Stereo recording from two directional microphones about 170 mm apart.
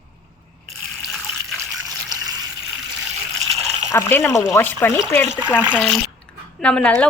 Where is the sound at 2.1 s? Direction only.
25° right (ahead or behind).